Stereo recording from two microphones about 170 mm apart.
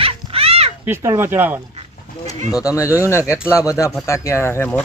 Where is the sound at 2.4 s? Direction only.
20° left (ahead or behind).